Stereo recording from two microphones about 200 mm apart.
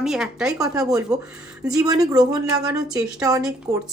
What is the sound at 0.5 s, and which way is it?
Speech, 15° right (ahead or behind).